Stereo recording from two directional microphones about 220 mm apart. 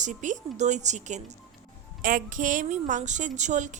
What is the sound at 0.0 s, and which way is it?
A woman's voice, 35° right (ahead or behind).